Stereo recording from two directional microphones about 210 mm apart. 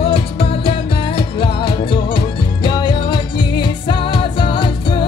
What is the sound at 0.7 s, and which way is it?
Music, 25° left (ahead or behind).